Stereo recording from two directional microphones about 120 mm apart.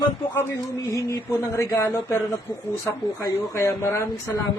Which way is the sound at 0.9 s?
25° left (ahead or behind).